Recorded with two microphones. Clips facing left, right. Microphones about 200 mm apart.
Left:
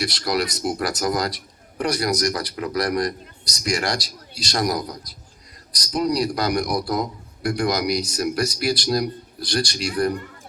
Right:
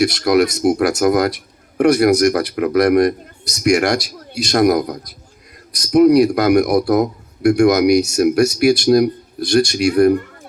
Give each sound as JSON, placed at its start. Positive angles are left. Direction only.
{"t": 0.0, "sound": "a man's voice", "side_deg": -50}